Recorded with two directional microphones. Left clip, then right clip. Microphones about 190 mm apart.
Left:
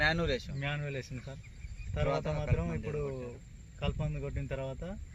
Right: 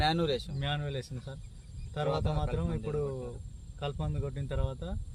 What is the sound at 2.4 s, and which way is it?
Speech, 5° right (ahead or behind).